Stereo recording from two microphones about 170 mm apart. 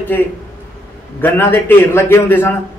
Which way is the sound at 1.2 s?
10° left (ahead or behind).